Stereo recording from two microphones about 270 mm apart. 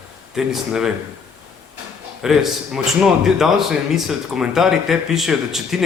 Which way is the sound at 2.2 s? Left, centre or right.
Centre.